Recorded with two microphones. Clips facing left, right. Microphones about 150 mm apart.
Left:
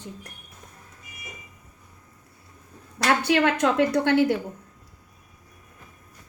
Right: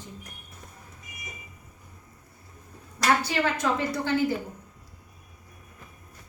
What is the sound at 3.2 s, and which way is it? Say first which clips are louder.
A woman's voice: left 6 dB; 70° left (ahead or behind).